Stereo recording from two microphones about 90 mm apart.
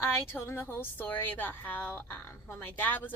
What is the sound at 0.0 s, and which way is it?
A woman's voice, 30° left (ahead or behind).